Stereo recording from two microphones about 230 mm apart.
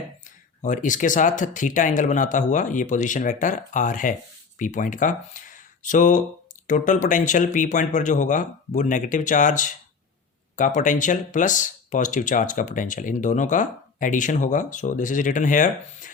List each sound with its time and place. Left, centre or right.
0.3 s speech: left